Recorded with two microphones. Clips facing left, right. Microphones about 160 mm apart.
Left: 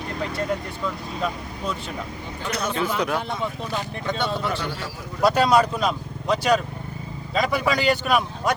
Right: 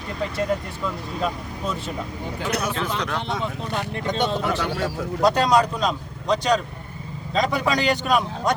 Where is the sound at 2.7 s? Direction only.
10° left (ahead or behind).